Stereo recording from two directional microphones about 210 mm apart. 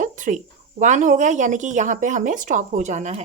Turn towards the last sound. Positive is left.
turn(degrees=-35)  # may be behind; listen again after turning